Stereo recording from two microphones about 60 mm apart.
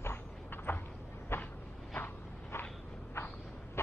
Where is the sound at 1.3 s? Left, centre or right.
Left.